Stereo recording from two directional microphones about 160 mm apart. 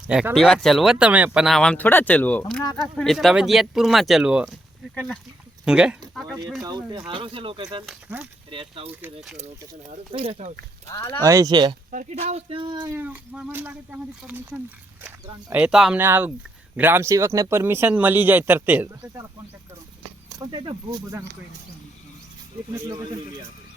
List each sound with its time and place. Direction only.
0.1 s speech: 5° right (ahead or behind)
5.6 s speech: 5° right (ahead or behind)
6.6 s speech: 25° right (ahead or behind)
7.9 s speech: 5° right (ahead or behind)
8.4 s speech: 35° right (ahead or behind)
10.1 s speech: 35° right (ahead or behind)
10.8 s speech: 20° left (ahead or behind)
11.2 s speech: 20° right (ahead or behind)
11.9 s speech: 50° right (ahead or behind); by 12.9 s 30° right (ahead or behind)
12.9 s speech: 10° right (ahead or behind)
20.5 s speech: 30° right (ahead or behind)